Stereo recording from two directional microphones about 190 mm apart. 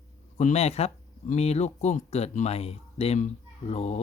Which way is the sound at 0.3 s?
35° left (ahead or behind).